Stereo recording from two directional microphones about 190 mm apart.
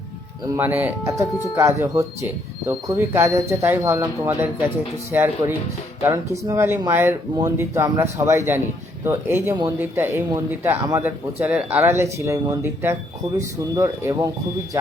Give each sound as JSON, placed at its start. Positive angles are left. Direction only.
{"t": 0.4, "sound": "speech", "side_deg": -15}